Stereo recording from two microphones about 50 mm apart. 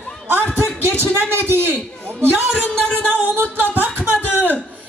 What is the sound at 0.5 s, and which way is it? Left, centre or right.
Speech, right.